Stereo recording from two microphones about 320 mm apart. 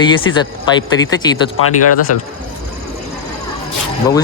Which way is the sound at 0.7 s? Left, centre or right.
Centre.